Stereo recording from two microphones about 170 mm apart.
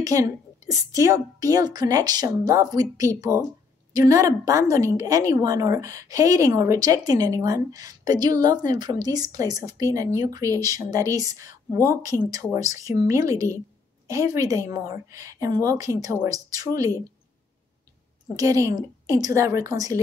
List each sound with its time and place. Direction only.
0.0 s a woman's voice: 20° right (ahead or behind)
18.3 s a woman's voice: 20° right (ahead or behind)